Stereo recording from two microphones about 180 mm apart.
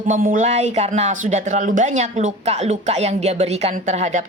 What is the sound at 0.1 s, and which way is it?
Speech, 45° right (ahead or behind).